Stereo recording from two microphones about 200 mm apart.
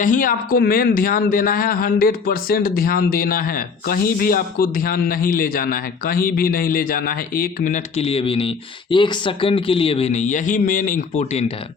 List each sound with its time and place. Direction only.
0.0 s speech: 40° left (ahead or behind)